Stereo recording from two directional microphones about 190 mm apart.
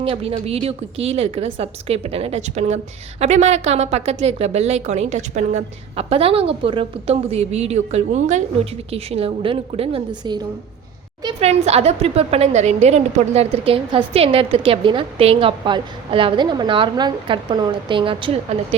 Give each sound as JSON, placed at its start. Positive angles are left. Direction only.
{"t": 0.0, "sound": "a woman's voice", "side_deg": -30}